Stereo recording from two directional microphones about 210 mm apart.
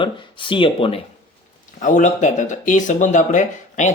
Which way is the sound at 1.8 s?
35° left (ahead or behind).